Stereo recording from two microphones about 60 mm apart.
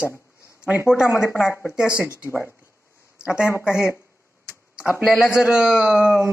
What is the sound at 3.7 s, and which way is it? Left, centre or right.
Speech, left.